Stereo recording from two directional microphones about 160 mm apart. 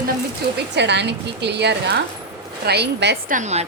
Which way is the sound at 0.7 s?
90° right.